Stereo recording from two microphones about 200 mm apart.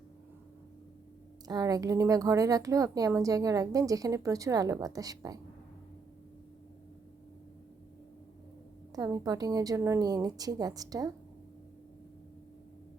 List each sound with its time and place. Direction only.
1.5 s speech: 20° right (ahead or behind)
9.0 s speech: 15° right (ahead or behind)